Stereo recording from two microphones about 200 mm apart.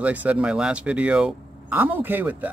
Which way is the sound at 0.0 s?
5° right (ahead or behind).